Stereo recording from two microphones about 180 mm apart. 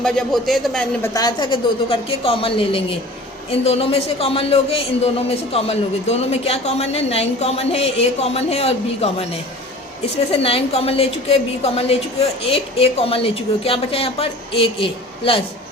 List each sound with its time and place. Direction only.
0.0 s a man's voice: 5° left (ahead or behind)
1.0 s a woman's voice: 20° left (ahead or behind)
10.3 s a man's voice: 35° left (ahead or behind)